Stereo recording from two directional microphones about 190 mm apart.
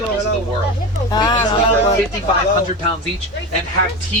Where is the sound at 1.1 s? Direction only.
20° left (ahead or behind).